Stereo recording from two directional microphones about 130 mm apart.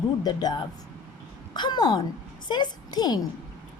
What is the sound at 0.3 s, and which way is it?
A woman's voice, 30° left (ahead or behind).